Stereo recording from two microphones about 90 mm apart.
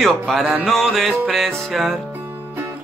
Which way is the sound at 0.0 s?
Centre (ahead or behind).